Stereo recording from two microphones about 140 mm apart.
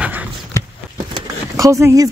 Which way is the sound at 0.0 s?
10° right (ahead or behind).